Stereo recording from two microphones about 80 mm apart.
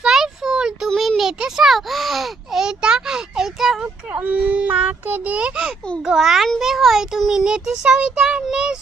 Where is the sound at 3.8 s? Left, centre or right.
Centre.